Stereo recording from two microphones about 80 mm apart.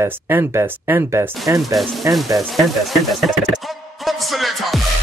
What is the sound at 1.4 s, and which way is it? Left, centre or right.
Speech, right.